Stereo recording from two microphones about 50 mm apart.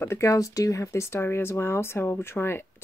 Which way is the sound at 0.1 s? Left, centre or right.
Left.